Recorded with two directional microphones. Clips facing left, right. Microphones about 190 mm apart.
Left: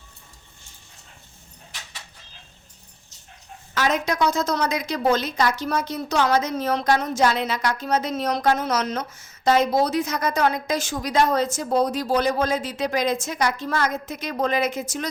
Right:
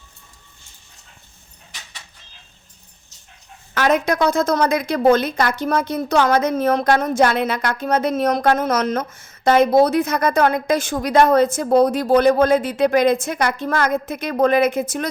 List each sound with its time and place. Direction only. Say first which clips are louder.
3.8 s a woman's voice: right 5 dB; 55° right (ahead or behind)